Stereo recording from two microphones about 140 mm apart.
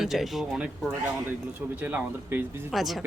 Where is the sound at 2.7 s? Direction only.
Centre (ahead or behind).